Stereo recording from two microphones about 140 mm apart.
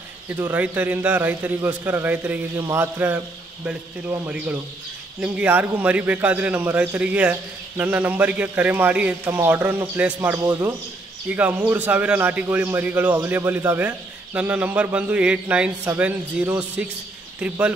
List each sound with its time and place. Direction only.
0.3 s a man's voice: 15° right (ahead or behind)
5.2 s a man's voice: 10° right (ahead or behind)